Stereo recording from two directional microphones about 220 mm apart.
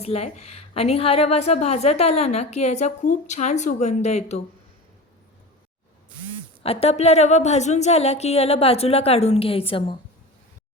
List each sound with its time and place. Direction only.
0.0 s a woman's voice: 30° left (ahead or behind)
6.6 s a woman's voice: 25° left (ahead or behind)